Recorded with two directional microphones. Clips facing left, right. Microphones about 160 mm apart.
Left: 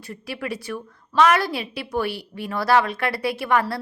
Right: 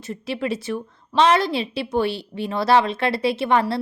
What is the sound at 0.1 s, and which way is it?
A woman's voice, 25° right (ahead or behind).